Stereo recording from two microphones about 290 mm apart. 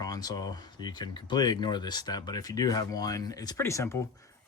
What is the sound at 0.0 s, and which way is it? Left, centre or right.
Speech, centre.